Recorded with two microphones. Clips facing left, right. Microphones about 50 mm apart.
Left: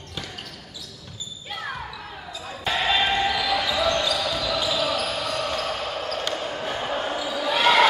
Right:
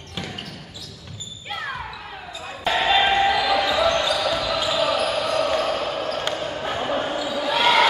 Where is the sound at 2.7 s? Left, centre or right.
Centre.